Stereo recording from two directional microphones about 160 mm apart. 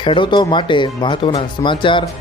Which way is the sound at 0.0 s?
30° left (ahead or behind).